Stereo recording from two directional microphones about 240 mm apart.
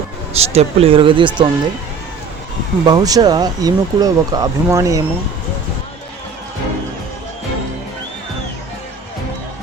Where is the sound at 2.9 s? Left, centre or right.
Centre.